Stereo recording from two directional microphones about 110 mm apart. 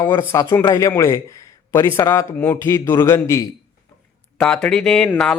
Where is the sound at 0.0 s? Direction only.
20° left (ahead or behind).